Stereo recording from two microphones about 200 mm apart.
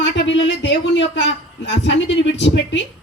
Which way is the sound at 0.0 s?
60° left (ahead or behind).